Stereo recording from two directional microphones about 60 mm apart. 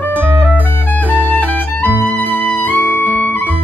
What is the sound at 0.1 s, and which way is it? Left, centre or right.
Music, right.